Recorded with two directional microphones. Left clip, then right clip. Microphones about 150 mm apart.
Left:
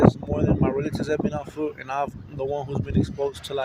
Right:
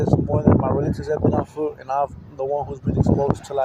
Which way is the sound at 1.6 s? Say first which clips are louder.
Even; 20° left (ahead or behind).